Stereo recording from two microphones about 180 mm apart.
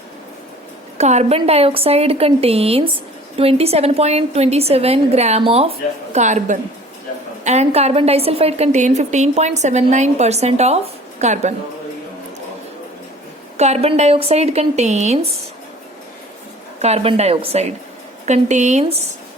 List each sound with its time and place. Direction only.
0.9 s a woman's voice: 40° right (ahead or behind)
6.1 s a woman's voice: 40° right (ahead or behind)
13.6 s a woman's voice: 40° right (ahead or behind)
16.8 s a woman's voice: 35° right (ahead or behind)